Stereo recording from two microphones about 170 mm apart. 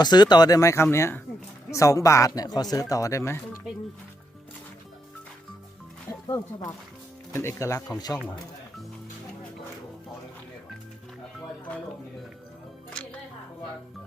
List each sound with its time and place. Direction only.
0.0 s speech: 25° left (ahead or behind)
6.1 s speech: 20° left (ahead or behind)